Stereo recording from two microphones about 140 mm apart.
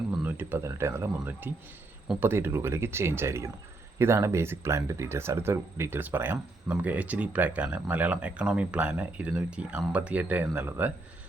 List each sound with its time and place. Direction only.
0.3 s speech: 15° right (ahead or behind)